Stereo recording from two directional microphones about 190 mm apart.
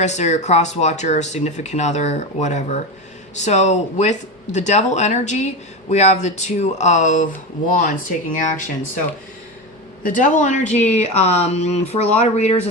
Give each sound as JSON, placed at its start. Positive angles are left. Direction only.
{"t": 0.0, "sound": "speech", "side_deg": 35}
{"t": 10.0, "sound": "speech", "side_deg": 40}